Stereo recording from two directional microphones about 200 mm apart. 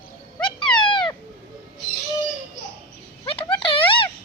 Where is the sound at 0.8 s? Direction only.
25° left (ahead or behind).